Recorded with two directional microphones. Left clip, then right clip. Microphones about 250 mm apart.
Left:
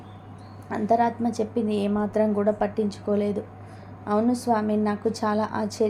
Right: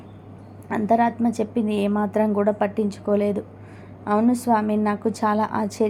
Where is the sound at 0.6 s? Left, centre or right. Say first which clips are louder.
Right 2 dB; centre.